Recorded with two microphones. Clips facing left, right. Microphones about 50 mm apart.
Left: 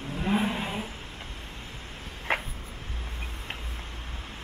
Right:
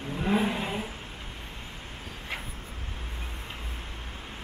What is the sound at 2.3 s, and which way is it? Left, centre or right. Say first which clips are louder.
Vehicle: left 9 dB; left.